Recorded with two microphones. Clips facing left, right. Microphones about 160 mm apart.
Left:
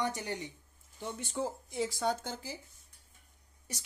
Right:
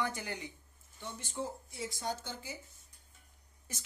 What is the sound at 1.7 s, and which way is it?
Speech, 90° left.